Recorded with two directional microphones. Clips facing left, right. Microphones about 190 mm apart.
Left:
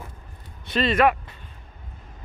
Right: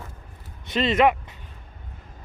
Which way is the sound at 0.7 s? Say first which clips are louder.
Even; 20° right (ahead or behind).